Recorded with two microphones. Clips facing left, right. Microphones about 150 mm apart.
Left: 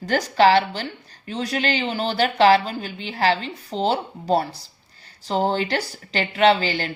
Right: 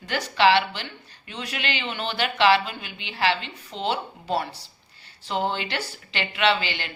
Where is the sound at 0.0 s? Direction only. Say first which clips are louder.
Left 4 dB; 40° left (ahead or behind).